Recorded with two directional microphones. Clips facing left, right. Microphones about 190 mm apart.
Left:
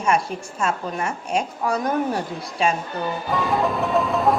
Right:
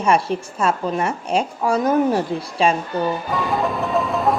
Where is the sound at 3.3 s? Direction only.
Centre (ahead or behind).